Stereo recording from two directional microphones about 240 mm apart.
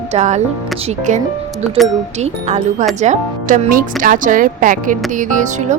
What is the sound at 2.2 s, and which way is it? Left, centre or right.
Speech, right.